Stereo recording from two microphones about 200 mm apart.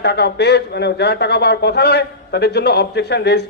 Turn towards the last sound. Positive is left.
turn(degrees=55)  # may be behind; listen again after turning